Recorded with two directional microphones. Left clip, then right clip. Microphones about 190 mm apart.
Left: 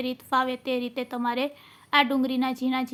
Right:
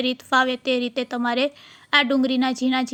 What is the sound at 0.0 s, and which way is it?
A woman's voice, 25° right (ahead or behind).